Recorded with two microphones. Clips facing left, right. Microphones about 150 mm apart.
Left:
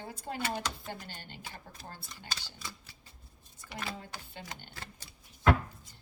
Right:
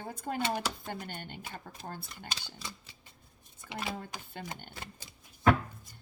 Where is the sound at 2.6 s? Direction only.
20° right (ahead or behind).